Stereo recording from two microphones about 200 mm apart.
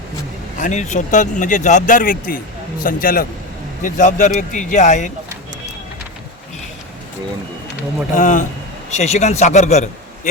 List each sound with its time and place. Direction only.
0.5 s a man's voice: 35° left (ahead or behind)
8.1 s speech: 40° left (ahead or behind)